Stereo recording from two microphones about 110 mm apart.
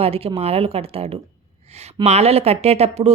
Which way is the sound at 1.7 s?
80° right.